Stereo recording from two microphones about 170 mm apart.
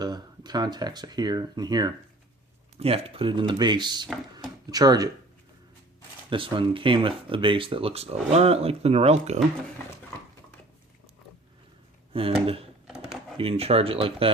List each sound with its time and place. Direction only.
0.0 s speech: 25° right (ahead or behind)
2.7 s speech: 35° right (ahead or behind)
6.3 s speech: 30° right (ahead or behind)
12.1 s speech: 35° right (ahead or behind)